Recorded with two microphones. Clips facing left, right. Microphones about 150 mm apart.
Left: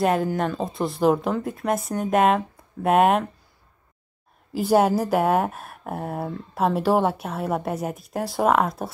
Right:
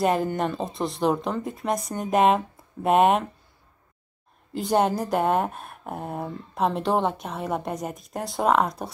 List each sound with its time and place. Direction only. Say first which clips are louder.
0.0 s speech: left 1 dB; centre (ahead or behind)
4.5 s speech: left 3 dB; 5° left (ahead or behind)